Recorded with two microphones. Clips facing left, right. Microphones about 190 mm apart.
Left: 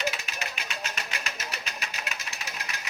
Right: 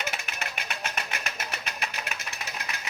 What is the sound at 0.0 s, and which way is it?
Music, 55° right (ahead or behind).